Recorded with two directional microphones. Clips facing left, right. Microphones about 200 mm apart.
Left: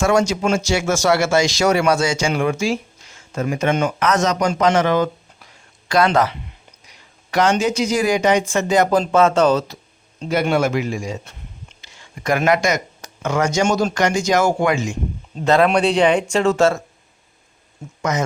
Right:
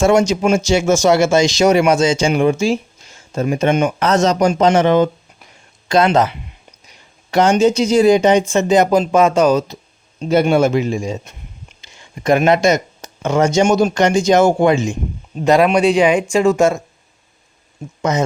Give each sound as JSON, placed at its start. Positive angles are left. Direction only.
{"t": 0.0, "sound": "speech", "side_deg": -20}
{"t": 10.2, "sound": "speech", "side_deg": -25}
{"t": 15.4, "sound": "speech", "side_deg": -15}
{"t": 18.1, "sound": "speech", "side_deg": -30}